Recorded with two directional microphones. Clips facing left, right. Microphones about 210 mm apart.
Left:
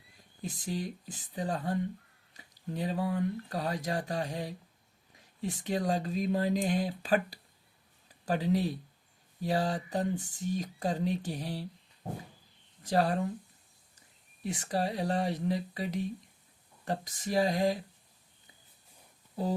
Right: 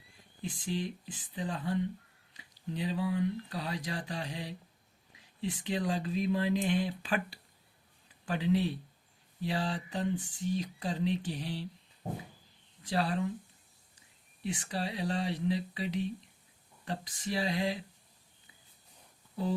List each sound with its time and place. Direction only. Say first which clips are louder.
0.4 s speech: even; 40° left (ahead or behind)
12.8 s speech: left 3 dB; 45° left (ahead or behind)
14.4 s speech: left 4 dB; 40° left (ahead or behind)